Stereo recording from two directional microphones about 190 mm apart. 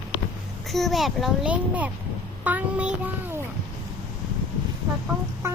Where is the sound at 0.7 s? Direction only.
Centre (ahead or behind).